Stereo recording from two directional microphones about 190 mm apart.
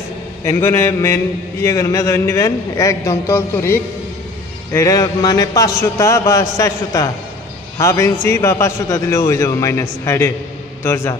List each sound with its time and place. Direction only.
0.4 s a man's voice: 15° left (ahead or behind)